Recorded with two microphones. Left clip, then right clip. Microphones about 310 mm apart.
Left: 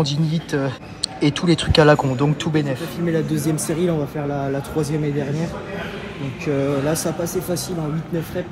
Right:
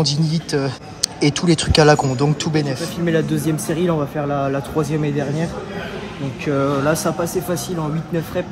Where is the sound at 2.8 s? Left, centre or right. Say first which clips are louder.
Right 3 dB; centre.